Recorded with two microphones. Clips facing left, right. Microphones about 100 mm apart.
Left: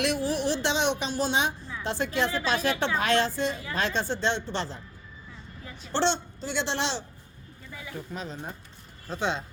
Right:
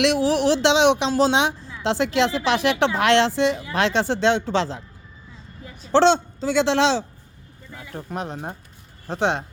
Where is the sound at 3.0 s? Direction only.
75° right (ahead or behind).